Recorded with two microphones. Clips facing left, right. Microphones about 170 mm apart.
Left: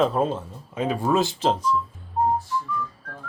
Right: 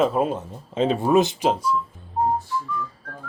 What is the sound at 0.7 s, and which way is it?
Speech, 25° right (ahead or behind).